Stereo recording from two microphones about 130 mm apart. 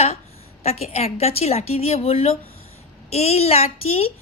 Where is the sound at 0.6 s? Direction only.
55° left (ahead or behind).